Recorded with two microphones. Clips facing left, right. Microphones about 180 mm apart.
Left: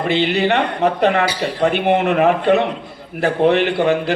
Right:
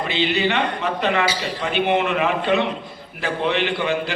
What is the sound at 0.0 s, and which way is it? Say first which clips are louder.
A man's voice: left 4 dB; 60° left (ahead or behind).